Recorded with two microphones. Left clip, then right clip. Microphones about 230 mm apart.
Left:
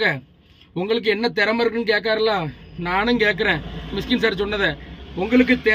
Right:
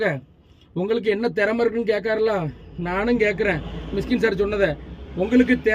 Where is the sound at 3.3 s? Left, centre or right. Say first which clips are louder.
Left 2 dB; left.